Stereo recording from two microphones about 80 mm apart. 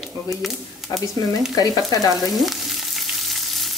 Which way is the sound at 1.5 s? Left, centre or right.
Left.